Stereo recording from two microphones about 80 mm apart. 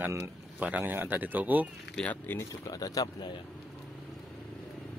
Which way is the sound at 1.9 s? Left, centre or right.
Centre.